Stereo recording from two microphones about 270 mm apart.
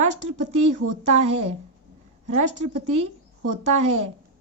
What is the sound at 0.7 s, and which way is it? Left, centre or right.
Speech, right.